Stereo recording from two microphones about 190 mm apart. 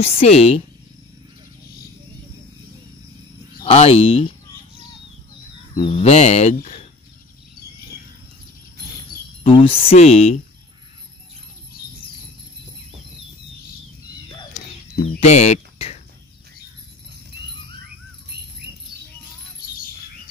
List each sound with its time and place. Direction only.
0.0 s speech: 30° left (ahead or behind)
3.6 s speech: 30° left (ahead or behind)
5.8 s speech: 35° left (ahead or behind)
9.4 s speech: 30° left (ahead or behind)
15.1 s speech: 35° left (ahead or behind)
18.3 s bird: 60° right (ahead or behind)